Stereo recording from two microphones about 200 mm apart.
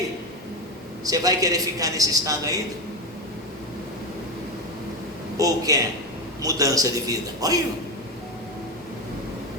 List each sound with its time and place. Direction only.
1.0 s a man's voice: 15° right (ahead or behind)
5.4 s a man's voice: 15° right (ahead or behind)